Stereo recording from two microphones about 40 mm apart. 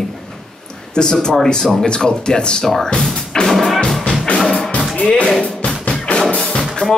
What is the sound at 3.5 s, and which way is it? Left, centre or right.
Music, centre.